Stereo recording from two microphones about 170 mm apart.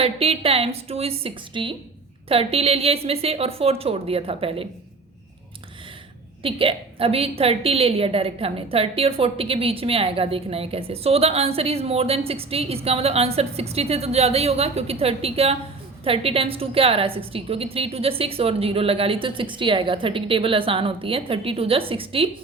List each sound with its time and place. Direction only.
0.0 s a woman's voice: 35° right (ahead or behind)
6.4 s a woman's voice: 30° right (ahead or behind)